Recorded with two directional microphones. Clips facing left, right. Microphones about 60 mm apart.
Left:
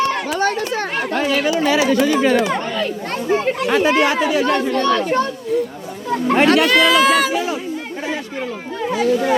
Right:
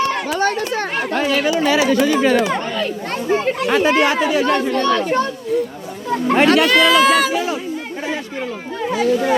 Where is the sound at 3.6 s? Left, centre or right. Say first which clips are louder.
Right 1 dB; right.